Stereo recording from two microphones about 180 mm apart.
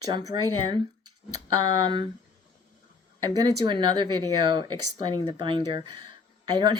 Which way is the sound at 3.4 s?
25° right (ahead or behind).